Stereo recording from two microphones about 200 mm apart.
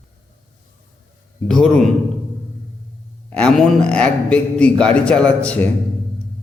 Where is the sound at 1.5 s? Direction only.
Centre (ahead or behind).